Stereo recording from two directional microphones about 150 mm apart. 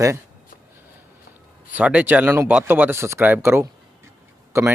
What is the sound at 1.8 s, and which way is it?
Speech, 10° right (ahead or behind).